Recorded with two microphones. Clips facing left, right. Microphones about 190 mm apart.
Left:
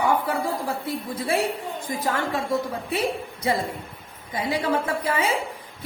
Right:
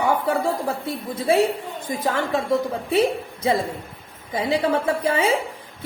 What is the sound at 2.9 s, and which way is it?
Speech, 25° right (ahead or behind).